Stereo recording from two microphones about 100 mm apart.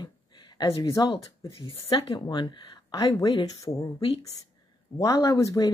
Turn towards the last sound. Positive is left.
turn(degrees=35)  # may be behind; listen again after turning